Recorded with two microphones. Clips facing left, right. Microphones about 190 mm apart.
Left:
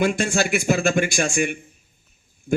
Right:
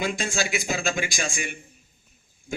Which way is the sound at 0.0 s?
60° left (ahead or behind).